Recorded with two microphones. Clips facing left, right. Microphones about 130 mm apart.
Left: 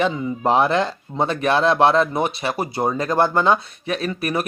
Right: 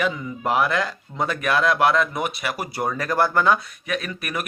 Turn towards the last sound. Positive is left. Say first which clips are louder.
# left 6 dB
turn(degrees=30)  # may be behind; listen again after turning